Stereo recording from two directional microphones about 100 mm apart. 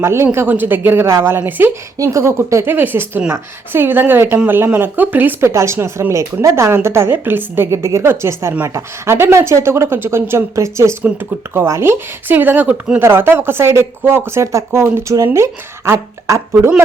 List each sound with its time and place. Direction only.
0.0 s speech: 25° right (ahead or behind)
2.0 s speech: 30° right (ahead or behind)